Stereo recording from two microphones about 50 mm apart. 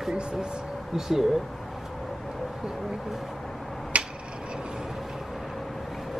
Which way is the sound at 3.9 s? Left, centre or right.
Right.